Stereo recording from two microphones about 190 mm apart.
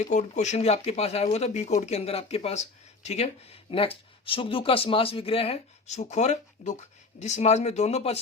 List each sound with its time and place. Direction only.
0.0 s speech: 40° left (ahead or behind)